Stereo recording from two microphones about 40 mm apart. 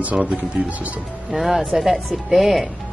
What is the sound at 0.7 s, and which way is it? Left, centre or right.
Speech, right.